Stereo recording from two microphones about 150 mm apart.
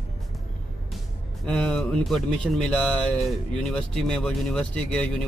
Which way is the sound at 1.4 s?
5° left (ahead or behind).